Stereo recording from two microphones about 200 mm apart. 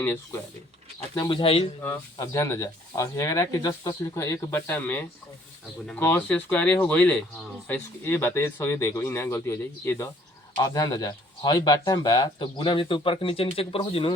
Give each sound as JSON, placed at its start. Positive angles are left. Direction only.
{"t": 0.0, "sound": "speech", "side_deg": 15}
{"t": 1.8, "sound": "speech", "side_deg": 15}